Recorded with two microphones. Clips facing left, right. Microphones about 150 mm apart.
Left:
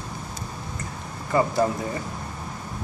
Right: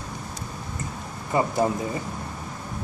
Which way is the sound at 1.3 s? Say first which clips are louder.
Left 2 dB; 20° right (ahead or behind).